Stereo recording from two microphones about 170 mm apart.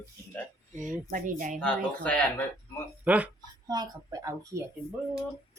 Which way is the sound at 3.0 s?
10° right (ahead or behind).